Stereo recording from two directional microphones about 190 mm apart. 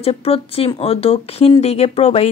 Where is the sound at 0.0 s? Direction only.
30° left (ahead or behind).